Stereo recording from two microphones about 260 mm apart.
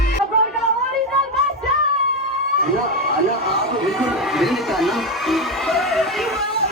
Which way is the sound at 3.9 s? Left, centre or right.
Centre.